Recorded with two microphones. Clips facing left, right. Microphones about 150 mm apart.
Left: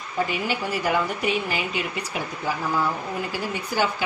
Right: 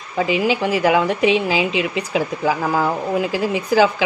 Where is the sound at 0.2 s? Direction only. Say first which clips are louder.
Right 8 dB; 90° right.